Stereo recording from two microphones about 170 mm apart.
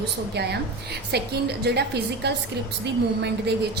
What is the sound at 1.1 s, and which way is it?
A woman's voice, 75° right (ahead or behind).